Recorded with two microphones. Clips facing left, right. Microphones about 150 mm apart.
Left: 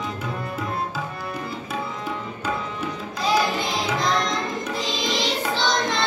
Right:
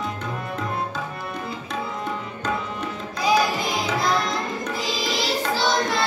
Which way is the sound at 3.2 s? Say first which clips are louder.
Right 1 dB; 5° right (ahead or behind).